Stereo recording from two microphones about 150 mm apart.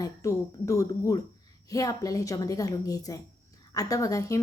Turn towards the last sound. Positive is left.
turn(degrees=20)  # may be behind; listen again after turning